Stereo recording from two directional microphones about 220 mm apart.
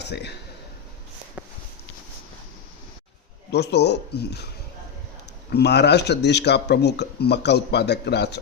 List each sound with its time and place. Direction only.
0.0 s a man's voice: 50° left (ahead or behind)
3.5 s speech: 50° left (ahead or behind)
5.5 s speech: 50° left (ahead or behind)